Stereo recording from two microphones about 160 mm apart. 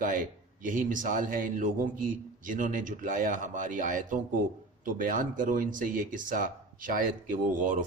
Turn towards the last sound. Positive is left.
turn(degrees=-55)  # may be behind; listen again after turning